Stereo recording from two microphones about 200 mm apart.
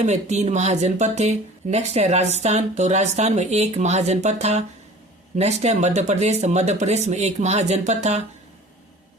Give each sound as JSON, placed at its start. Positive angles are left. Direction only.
{"t": 0.0, "sound": "speech", "side_deg": -35}